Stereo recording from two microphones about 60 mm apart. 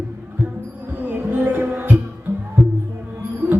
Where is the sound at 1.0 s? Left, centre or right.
Right.